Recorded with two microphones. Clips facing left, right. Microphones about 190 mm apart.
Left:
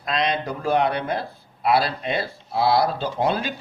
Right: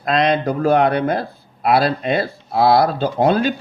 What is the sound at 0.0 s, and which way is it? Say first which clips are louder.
Speech: right 7 dB; 50° right (ahead or behind).